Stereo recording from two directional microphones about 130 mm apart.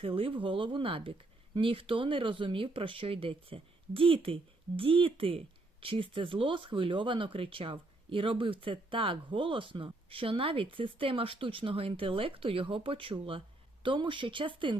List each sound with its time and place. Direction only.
0.0 s speech: 45° right (ahead or behind)